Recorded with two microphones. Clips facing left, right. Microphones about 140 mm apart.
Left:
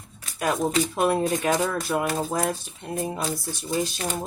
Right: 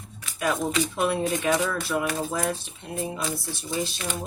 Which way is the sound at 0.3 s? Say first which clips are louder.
Left 2 dB; 40° left (ahead or behind).